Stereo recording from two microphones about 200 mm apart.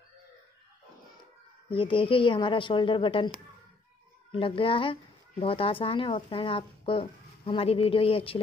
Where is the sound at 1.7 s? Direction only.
25° left (ahead or behind).